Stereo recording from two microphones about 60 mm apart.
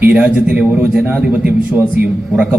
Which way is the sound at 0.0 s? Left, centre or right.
Right.